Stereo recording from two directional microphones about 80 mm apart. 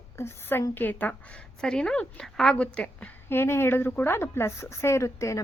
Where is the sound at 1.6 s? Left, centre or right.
Centre.